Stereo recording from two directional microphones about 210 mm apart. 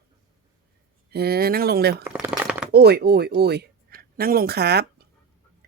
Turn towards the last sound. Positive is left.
turn(degrees=-50)  # may be behind; listen again after turning